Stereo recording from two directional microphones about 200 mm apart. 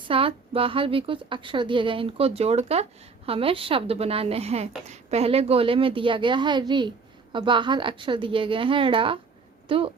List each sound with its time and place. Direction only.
0.1 s a woman's voice: 25° right (ahead or behind)